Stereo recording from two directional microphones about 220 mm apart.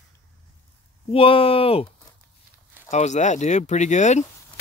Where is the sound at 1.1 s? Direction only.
25° left (ahead or behind).